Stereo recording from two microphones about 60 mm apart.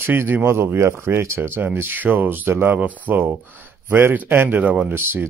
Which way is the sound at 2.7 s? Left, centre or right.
Right.